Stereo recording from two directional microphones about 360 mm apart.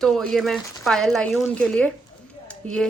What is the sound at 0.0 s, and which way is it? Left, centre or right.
A woman's voice, centre.